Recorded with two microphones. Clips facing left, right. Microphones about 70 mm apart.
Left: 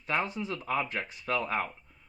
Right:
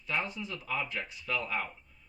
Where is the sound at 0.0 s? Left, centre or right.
Left.